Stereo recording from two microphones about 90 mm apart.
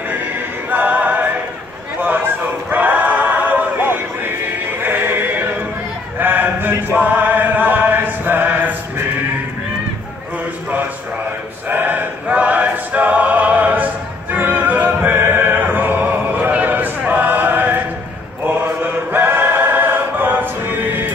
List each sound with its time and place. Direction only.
0.1 s music: 20° right (ahead or behind)
2.0 s choir: 20° right (ahead or behind)
4.7 s music: 25° right (ahead or behind)
6.1 s chant: 20° right (ahead or behind)
11.7 s choir: 20° right (ahead or behind)
14.3 s opera: 20° right (ahead or behind)
18.4 s choir: 25° right (ahead or behind)